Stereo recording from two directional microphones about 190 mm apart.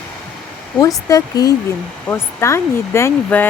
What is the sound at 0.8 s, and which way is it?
Speech, 20° left (ahead or behind).